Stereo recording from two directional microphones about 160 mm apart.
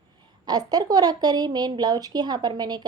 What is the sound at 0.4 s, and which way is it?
A woman's voice, 25° right (ahead or behind).